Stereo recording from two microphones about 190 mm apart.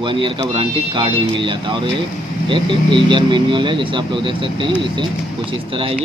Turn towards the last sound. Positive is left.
turn(degrees=-30)  # may be behind; listen again after turning